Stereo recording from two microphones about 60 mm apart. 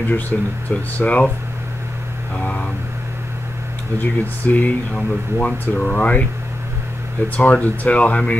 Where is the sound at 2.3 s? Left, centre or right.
Left.